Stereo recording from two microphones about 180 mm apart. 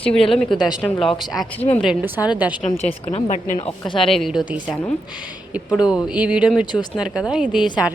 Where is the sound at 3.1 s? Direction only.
40° left (ahead or behind).